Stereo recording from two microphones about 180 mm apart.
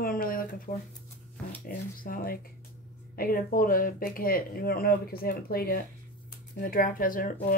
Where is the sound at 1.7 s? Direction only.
50° left (ahead or behind).